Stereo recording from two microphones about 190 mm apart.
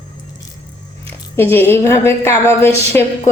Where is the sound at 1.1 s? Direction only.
10° left (ahead or behind).